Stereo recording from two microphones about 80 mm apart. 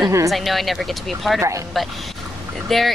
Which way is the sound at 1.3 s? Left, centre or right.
Right.